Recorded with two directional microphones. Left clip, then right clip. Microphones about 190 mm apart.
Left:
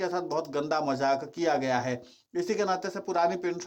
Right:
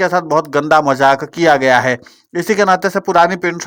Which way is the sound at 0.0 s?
40° right (ahead or behind).